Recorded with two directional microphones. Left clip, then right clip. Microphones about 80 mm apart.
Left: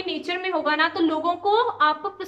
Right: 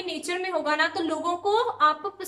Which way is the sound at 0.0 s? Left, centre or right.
Right.